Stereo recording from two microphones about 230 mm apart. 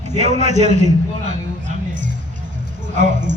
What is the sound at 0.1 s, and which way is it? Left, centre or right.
A man's voice, right.